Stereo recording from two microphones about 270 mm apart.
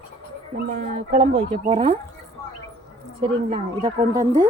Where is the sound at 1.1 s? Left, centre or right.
Right.